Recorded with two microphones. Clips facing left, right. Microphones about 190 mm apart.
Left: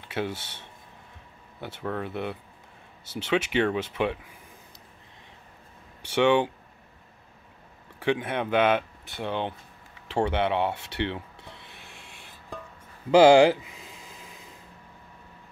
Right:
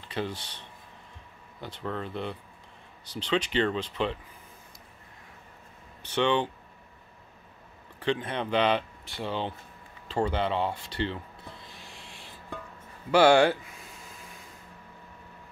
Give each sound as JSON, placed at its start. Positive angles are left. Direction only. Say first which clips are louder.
{"t": 0.1, "sound": "speech", "louder": "left 2 dB", "side_deg": 10}
{"t": 1.6, "sound": "speech", "louder": "left 3 dB", "side_deg": 10}
{"t": 6.0, "sound": "speech", "louder": "left 4 dB", "side_deg": 10}
{"t": 8.0, "sound": "speech", "louder": "left 3 dB", "side_deg": 10}
{"t": 9.2, "sound": "speech", "louder": "left 2 dB", "side_deg": 60}
{"t": 10.2, "sound": "wood", "louder": "left 3 dB", "side_deg": 70}
{"t": 13.1, "sound": "speech", "louder": "left 4 dB", "side_deg": 20}
{"t": 13.7, "sound": "a sound", "louder": "left 1 dB", "side_deg": 90}